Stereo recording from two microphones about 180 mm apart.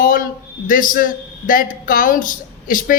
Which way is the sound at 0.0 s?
50° left (ahead or behind).